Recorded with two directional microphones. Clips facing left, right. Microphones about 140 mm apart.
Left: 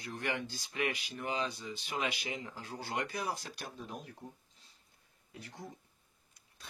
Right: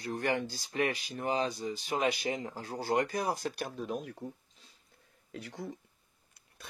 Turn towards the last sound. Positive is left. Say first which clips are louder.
# right 7 dB
turn(degrees=-90)